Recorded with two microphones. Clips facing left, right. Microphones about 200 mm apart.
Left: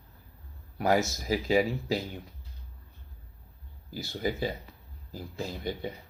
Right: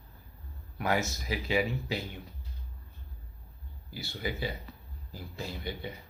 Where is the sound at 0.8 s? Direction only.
40° left (ahead or behind).